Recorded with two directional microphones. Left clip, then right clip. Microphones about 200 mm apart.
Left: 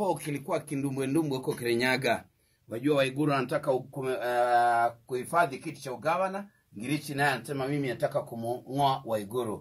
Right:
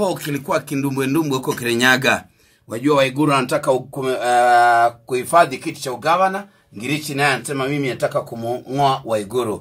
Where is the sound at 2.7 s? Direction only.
20° right (ahead or behind); by 4.8 s 5° right (ahead or behind).